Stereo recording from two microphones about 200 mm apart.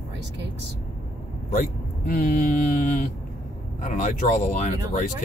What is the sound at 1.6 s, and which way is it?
Speech, 45° left (ahead or behind).